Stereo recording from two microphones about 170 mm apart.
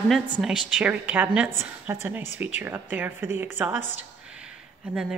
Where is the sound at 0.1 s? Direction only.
Centre (ahead or behind).